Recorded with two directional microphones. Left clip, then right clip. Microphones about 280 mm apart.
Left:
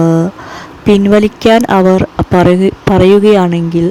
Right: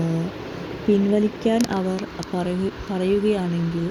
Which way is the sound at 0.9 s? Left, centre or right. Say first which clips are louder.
Left 12 dB; left.